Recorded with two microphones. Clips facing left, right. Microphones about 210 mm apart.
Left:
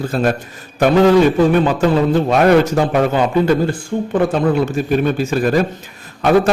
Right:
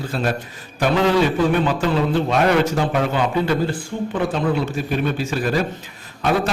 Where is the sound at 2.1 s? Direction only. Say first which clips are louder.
Left 6 dB; 45° left (ahead or behind).